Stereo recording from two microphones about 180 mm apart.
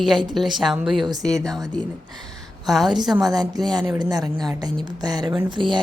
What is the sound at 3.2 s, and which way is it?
Speech, 20° right (ahead or behind).